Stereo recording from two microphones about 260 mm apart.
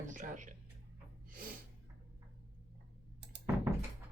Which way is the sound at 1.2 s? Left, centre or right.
Right.